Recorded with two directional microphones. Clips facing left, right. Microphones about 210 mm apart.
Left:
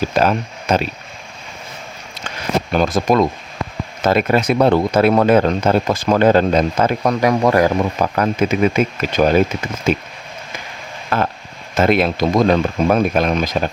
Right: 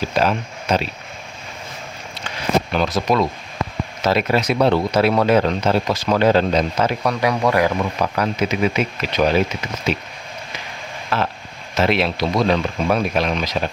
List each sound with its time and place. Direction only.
0.1 s speech: 50° left (ahead or behind)
2.7 s speech: 50° left (ahead or behind)
11.1 s speech: 50° left (ahead or behind)